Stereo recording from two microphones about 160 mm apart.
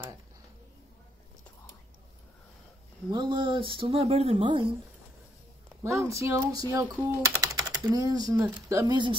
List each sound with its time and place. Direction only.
3.1 s speech: 30° right (ahead or behind)
5.9 s speech: 20° right (ahead or behind)